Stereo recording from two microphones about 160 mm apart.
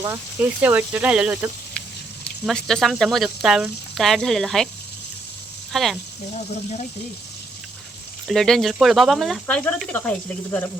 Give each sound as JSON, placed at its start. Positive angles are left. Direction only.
{"t": 0.0, "sound": "speech", "side_deg": -15}
{"t": 2.5, "sound": "speech", "side_deg": 5}
{"t": 5.7, "sound": "speech", "side_deg": 0}
{"t": 6.3, "sound": "speech", "side_deg": 40}
{"t": 8.3, "sound": "speech", "side_deg": 0}